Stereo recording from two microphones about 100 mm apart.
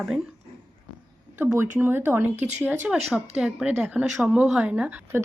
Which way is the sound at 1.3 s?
20° right (ahead or behind).